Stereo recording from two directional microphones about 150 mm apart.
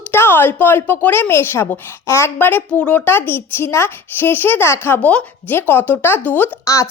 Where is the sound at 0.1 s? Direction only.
15° left (ahead or behind).